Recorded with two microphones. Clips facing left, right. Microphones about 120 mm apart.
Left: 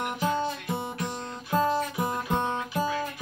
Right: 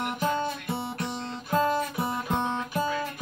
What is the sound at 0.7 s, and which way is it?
Music, 15° left (ahead or behind).